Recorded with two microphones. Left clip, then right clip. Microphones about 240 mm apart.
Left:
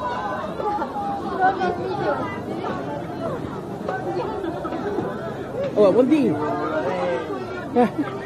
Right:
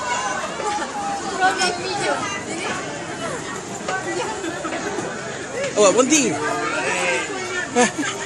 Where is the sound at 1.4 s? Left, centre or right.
Right.